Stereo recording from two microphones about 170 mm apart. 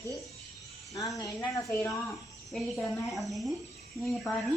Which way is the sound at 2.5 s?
Centre (ahead or behind).